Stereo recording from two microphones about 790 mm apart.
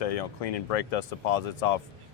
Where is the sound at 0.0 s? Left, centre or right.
Left.